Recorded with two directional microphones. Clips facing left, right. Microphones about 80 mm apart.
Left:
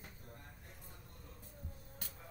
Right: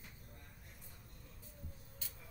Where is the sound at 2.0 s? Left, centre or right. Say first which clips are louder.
Left 3 dB; left.